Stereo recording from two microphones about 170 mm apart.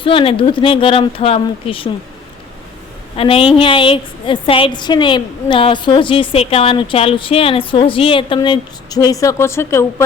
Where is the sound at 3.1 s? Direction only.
35° left (ahead or behind).